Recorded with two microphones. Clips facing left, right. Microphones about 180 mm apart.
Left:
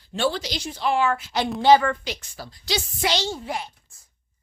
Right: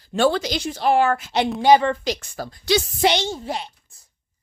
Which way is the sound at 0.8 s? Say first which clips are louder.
Right 4 dB; 40° right (ahead or behind).